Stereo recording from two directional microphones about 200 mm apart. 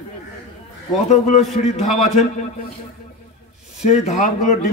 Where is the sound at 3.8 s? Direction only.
35° left (ahead or behind).